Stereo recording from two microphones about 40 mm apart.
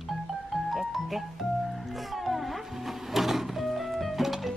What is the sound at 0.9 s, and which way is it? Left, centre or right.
Speech, centre.